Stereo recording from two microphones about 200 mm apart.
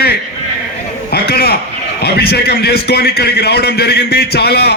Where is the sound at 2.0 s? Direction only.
55° left (ahead or behind).